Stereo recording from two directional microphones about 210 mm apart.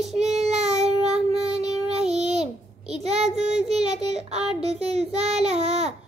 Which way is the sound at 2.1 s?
30° right (ahead or behind).